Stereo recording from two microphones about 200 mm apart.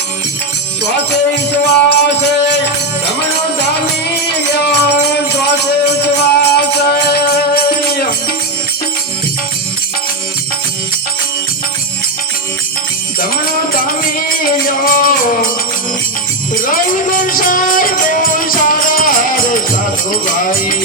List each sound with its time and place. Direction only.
1.6 s music: 55° left (ahead or behind)
4.5 s music: 55° left (ahead or behind)
13.1 s music: 45° left (ahead or behind)
14.8 s music: 45° left (ahead or behind)
16.6 s music: 45° left (ahead or behind)